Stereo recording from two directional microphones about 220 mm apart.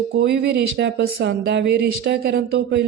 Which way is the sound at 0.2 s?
50° right (ahead or behind).